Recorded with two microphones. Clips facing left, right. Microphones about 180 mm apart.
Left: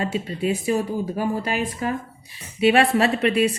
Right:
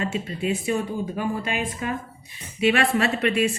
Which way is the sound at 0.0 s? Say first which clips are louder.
Left 2 dB; 35° left (ahead or behind).